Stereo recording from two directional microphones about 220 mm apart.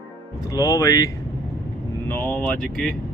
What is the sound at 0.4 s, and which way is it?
Speech, 15° left (ahead or behind).